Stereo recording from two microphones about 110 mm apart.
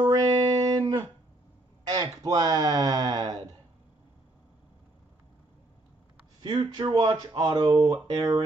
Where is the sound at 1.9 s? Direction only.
35° right (ahead or behind).